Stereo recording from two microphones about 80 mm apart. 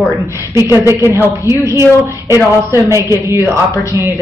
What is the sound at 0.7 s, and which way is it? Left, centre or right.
Speech, right.